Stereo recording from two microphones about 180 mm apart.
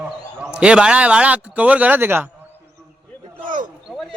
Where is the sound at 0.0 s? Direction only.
5° right (ahead or behind).